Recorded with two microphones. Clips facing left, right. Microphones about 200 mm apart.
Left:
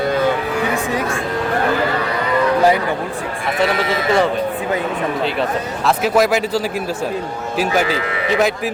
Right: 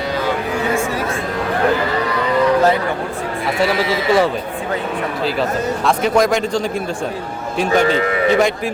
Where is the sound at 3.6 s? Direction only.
Centre (ahead or behind).